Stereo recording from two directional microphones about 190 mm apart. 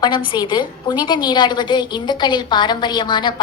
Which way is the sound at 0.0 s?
25° left (ahead or behind).